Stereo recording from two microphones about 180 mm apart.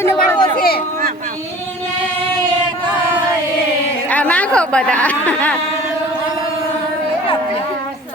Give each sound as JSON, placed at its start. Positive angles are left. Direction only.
{"t": 0.0, "sound": "chatter", "side_deg": 15}
{"t": 0.5, "sound": "a sound", "side_deg": 55}
{"t": 4.1, "sound": "a woman's voice", "side_deg": 10}